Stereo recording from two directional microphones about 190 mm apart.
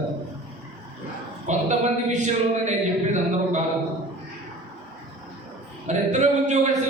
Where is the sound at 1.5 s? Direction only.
40° right (ahead or behind).